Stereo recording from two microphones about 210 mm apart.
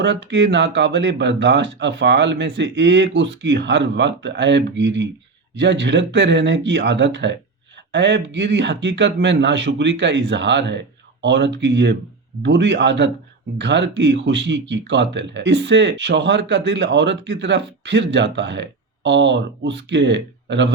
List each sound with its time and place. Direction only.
0.0 s speech: 55° right (ahead or behind)